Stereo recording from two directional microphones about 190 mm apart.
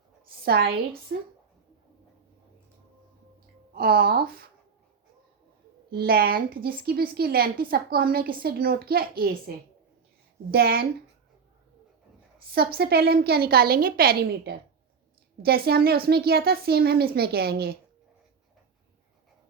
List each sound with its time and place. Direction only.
0.4 s a woman's voice: 55° right (ahead or behind)
3.8 s a woman's voice: 55° right (ahead or behind)
5.9 s a woman's voice: 50° right (ahead or behind)
10.5 s a woman's voice: 55° right (ahead or behind)
12.5 s a woman's voice: 55° right (ahead or behind)